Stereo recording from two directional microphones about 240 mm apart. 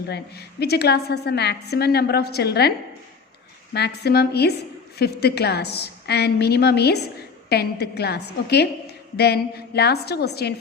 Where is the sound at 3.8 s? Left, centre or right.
Left.